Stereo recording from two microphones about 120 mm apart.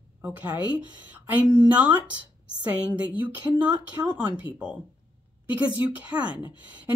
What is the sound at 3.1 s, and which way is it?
Speech, 15° right (ahead or behind).